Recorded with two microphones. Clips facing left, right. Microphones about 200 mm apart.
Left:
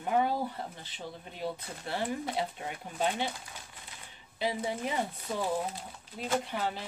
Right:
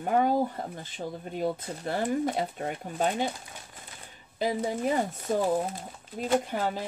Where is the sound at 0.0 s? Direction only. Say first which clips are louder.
Right 5 dB; 45° right (ahead or behind).